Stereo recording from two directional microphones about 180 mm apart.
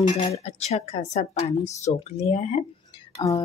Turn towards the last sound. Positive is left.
turn(degrees=25)  # may be behind; listen again after turning